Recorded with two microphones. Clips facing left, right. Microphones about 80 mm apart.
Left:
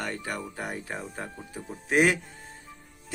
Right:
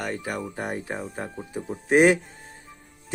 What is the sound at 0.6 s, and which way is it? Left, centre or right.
Speech, right.